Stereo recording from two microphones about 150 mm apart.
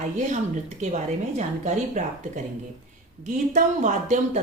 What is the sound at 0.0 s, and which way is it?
Speech, 55° right (ahead or behind).